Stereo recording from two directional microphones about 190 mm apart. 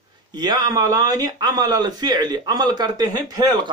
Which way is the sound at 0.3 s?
20° right (ahead or behind).